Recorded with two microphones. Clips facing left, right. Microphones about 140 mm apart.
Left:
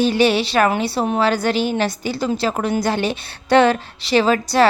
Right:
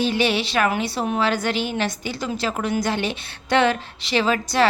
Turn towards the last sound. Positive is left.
turn(degrees=40)  # may be behind; listen again after turning